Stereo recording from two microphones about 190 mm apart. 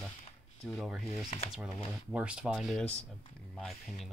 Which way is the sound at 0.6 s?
Centre (ahead or behind).